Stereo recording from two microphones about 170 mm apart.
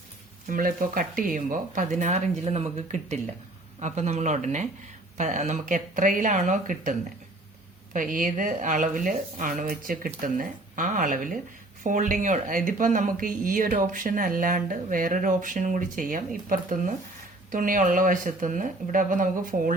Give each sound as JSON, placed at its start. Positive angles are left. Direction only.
{"t": 0.4, "sound": "speech", "side_deg": -55}
{"t": 7.9, "sound": "speech", "side_deg": -50}